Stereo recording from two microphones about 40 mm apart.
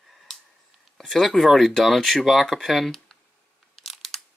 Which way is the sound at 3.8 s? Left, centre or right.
Centre.